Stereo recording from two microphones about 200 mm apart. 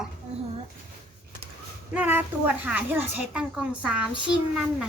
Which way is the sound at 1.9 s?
10° right (ahead or behind).